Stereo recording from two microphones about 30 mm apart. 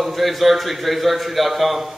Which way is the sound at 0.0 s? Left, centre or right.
Centre.